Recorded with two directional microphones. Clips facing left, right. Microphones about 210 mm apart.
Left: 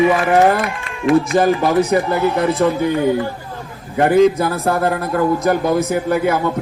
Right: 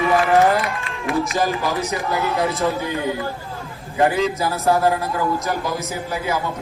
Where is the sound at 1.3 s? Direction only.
50° left (ahead or behind).